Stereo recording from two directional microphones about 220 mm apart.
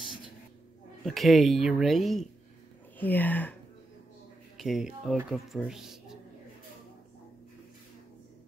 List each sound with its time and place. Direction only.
1.0 s speech: centre (ahead or behind)
4.6 s speech: centre (ahead or behind)